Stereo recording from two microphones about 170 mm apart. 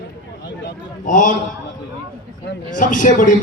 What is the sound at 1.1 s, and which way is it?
Speech, 50° left (ahead or behind).